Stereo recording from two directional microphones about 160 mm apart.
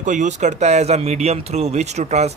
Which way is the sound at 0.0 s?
50° right (ahead or behind).